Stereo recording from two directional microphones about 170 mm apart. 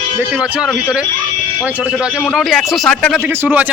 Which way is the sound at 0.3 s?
5° right (ahead or behind).